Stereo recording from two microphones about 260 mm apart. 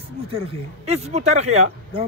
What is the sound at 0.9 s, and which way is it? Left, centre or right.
Speech, right.